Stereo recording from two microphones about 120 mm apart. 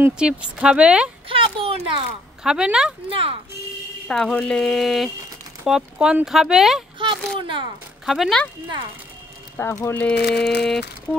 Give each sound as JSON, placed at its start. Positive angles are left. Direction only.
{"t": 0.0, "sound": "speech", "side_deg": -10}
{"t": 1.3, "sound": "speech", "side_deg": -50}
{"t": 2.4, "sound": "speech", "side_deg": -5}
{"t": 3.1, "sound": "speech", "side_deg": -50}
{"t": 4.1, "sound": "speech", "side_deg": 5}
{"t": 7.3, "sound": "speech", "side_deg": -45}
{"t": 8.0, "sound": "speech", "side_deg": 0}
{"t": 9.6, "sound": "speech", "side_deg": 25}
{"t": 10.0, "sound": "speech", "side_deg": 5}